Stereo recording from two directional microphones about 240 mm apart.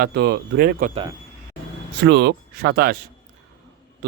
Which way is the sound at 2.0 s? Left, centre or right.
Right.